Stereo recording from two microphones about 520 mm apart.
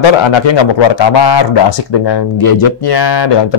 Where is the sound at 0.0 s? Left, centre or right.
Left.